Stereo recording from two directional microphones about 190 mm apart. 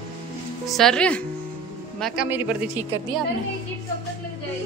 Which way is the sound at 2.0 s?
5° right (ahead or behind).